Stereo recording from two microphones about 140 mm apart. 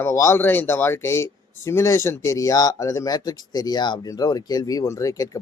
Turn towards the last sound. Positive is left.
turn(degrees=25)  # may be behind; listen again after turning